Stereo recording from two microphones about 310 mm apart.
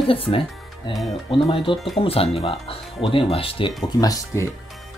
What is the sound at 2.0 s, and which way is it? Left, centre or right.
Speech, centre.